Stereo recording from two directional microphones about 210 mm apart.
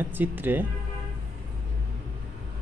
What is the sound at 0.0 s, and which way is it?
Speech, 10° right (ahead or behind).